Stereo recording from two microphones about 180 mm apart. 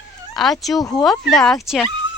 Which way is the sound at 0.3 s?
Centre (ahead or behind).